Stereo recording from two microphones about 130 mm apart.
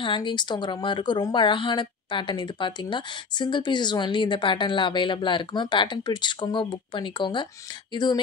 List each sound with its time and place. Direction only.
0.0 s speech: 40° left (ahead or behind)